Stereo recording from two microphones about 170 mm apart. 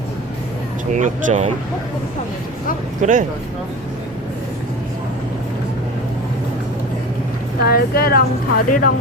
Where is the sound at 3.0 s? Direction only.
45° right (ahead or behind).